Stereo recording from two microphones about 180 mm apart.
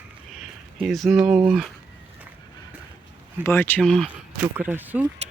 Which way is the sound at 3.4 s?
10° left (ahead or behind).